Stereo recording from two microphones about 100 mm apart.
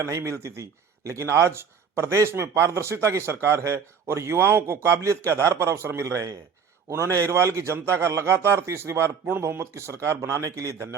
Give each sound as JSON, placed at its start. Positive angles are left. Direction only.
{"t": 0.0, "sound": "speech", "side_deg": -30}